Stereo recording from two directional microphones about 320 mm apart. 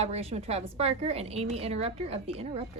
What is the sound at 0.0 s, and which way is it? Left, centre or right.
A woman's voice, centre.